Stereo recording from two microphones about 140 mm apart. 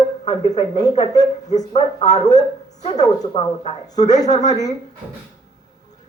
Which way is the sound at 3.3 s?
45° left (ahead or behind).